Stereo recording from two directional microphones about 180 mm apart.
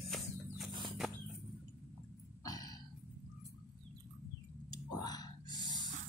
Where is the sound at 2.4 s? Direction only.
20° left (ahead or behind).